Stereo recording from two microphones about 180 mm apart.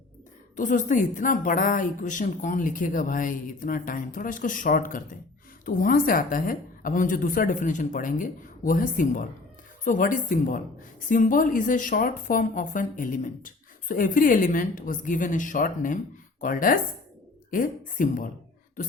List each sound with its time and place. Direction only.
0.5 s a woman's voice: 45° left (ahead or behind)